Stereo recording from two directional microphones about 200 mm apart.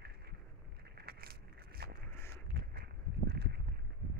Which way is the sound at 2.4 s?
50° right (ahead or behind).